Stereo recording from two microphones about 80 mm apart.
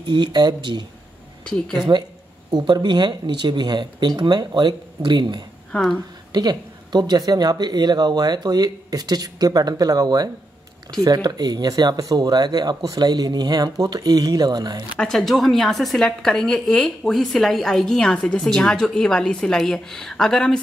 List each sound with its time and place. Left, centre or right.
0.0 s speech: right
1.4 s speech: centre
2.5 s speech: right
15.0 s a woman's voice: centre